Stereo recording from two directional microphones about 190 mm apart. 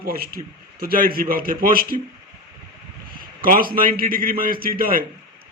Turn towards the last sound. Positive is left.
turn(degrees=-50)  # may be behind; listen again after turning